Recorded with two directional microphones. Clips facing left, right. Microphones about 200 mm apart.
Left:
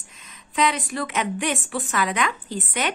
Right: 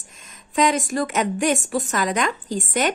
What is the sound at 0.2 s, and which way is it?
A woman's voice, 45° right (ahead or behind).